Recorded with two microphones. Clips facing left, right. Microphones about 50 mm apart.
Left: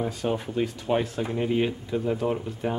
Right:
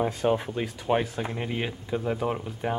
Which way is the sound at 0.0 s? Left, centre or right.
Centre.